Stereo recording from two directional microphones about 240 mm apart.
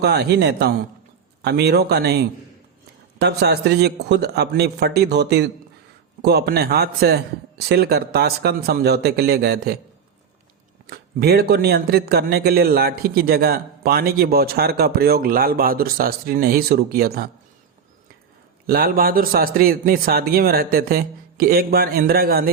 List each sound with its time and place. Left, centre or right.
0.0 s a man's voice: right
10.8 s a man's voice: right
18.6 s a man's voice: right